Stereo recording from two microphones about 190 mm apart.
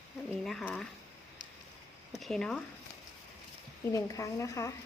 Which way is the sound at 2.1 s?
Centre (ahead or behind).